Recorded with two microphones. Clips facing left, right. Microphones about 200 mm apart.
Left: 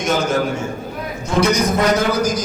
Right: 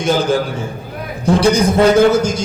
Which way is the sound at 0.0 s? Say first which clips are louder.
Right 3 dB; 30° right (ahead or behind).